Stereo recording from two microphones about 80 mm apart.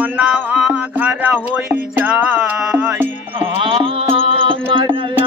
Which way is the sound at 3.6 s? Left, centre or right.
Right.